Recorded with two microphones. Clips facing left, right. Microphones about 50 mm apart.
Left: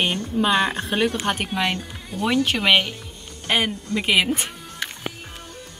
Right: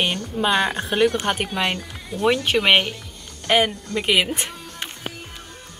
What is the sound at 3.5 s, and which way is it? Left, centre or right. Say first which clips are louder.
Speech: right 3 dB; centre.